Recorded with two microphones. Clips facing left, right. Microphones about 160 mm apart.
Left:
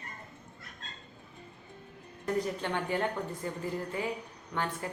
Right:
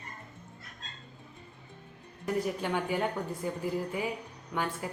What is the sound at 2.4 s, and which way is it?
Speech, 10° right (ahead or behind).